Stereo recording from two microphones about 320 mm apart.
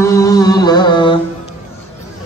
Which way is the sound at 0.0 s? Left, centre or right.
Centre.